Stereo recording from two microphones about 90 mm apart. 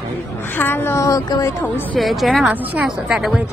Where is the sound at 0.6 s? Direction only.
25° left (ahead or behind).